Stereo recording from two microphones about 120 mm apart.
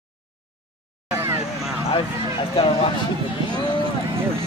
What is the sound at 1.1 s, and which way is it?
Vehicle, 20° right (ahead or behind).